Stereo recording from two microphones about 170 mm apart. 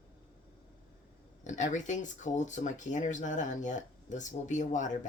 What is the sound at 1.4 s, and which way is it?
Speech, 45° left (ahead or behind).